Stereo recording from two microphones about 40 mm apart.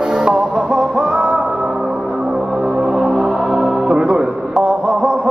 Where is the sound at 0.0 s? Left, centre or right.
Centre.